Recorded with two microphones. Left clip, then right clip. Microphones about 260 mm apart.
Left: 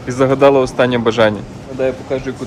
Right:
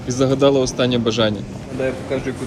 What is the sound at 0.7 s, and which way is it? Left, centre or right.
Speech, centre.